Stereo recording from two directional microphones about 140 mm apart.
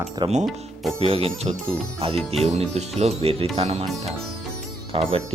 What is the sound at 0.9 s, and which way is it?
Speech, 45° right (ahead or behind).